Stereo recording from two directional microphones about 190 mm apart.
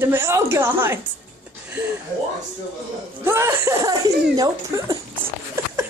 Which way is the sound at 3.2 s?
15° right (ahead or behind).